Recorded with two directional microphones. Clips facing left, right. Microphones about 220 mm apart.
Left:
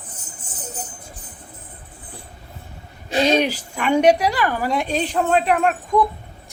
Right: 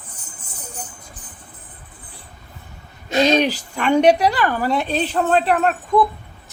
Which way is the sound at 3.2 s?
10° left (ahead or behind).